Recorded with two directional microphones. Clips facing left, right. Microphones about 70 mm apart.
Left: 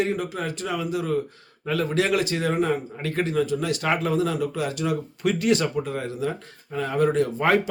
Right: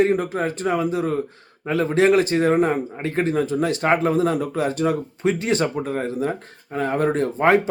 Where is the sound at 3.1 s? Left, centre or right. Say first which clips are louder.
Right 2 dB; right.